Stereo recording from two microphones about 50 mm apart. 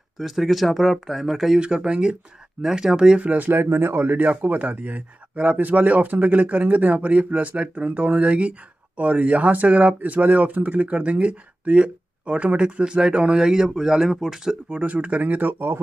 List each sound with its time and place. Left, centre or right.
0.2 s speech: centre
1.6 s speech: centre
3.2 s a man's voice: right
3.6 s a man's voice: right; by 14.6 s centre
14.7 s speech: right